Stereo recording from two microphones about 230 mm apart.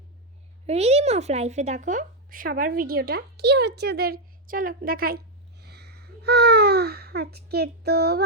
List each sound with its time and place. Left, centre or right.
0.7 s speech: right